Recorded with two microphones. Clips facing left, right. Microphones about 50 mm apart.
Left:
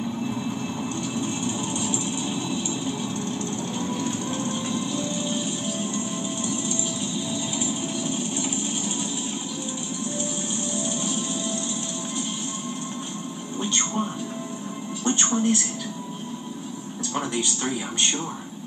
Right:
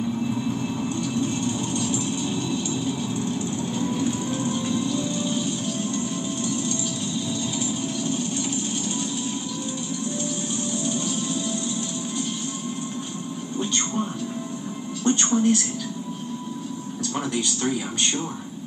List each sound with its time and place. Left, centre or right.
0.2 s vehicle: centre
1.0 s a sound: centre
3.2 s music: centre
10.8 s music: centre
13.6 s television: centre
15.0 s music: centre
17.1 s a sound: centre